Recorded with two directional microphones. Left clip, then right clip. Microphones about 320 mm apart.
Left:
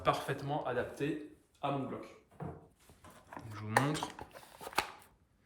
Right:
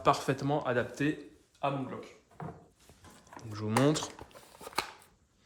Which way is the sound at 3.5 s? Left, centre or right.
Centre.